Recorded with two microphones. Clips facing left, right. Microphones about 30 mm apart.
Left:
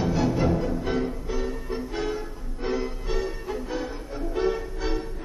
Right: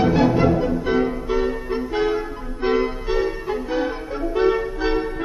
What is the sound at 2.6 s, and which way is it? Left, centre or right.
Music, right.